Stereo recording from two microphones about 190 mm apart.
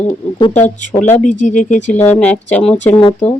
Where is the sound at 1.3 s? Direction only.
40° left (ahead or behind).